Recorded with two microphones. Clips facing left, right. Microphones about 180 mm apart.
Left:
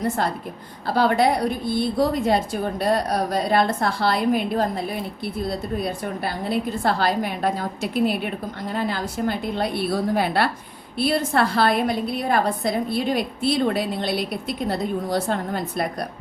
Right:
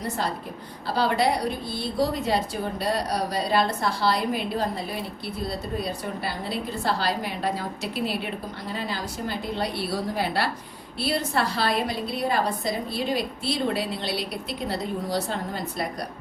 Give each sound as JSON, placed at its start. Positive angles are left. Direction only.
{"t": 0.9, "sound": "a woman's voice", "side_deg": 50}
{"t": 5.8, "sound": "a woman's voice", "side_deg": 55}